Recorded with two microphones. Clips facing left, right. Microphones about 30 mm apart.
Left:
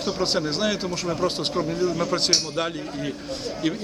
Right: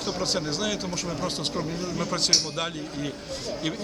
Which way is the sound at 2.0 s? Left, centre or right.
Left.